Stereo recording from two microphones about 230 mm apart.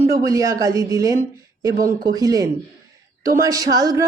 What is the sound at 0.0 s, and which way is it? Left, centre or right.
Speech, centre.